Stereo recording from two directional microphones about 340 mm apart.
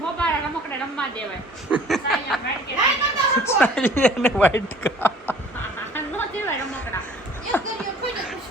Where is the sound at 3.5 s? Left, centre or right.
Centre.